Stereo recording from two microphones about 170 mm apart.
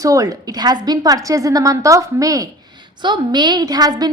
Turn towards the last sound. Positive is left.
turn(degrees=-20)  # may be behind; listen again after turning